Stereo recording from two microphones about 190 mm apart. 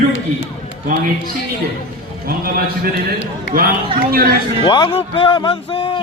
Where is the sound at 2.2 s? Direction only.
50° right (ahead or behind).